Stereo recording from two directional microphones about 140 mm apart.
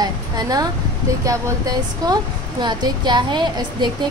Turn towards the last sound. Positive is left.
turn(degrees=-30)  # may be behind; listen again after turning